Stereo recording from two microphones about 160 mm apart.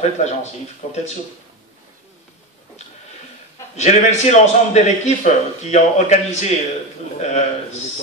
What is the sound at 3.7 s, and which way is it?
A man's voice, 45° left (ahead or behind).